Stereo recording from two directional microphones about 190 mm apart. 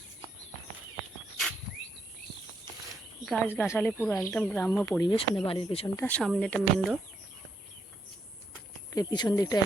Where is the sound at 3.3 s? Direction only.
10° left (ahead or behind).